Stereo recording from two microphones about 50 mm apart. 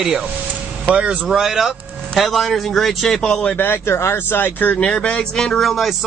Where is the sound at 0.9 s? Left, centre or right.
Right.